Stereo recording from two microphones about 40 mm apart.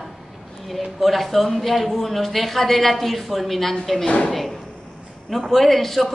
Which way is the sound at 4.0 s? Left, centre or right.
Left.